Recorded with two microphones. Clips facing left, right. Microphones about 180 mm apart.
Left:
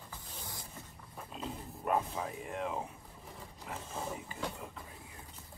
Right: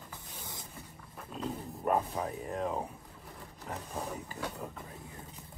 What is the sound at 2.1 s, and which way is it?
Bow-wow, 35° right (ahead or behind).